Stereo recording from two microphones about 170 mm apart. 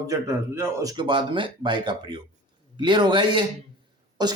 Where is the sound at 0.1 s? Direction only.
15° right (ahead or behind).